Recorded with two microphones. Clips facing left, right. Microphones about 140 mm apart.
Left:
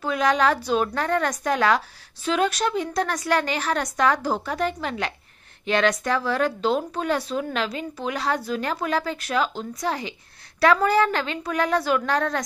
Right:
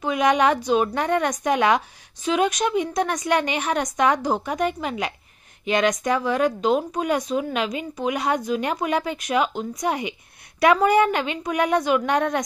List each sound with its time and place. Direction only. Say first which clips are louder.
0.0 s speech: right 2 dB; 15° right (ahead or behind)
2.9 s speech: right 1 dB; 15° right (ahead or behind)